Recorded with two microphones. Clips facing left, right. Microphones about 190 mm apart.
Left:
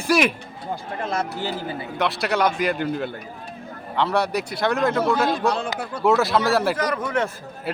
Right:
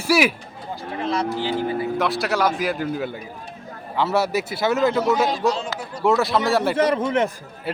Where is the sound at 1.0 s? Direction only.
50° left (ahead or behind).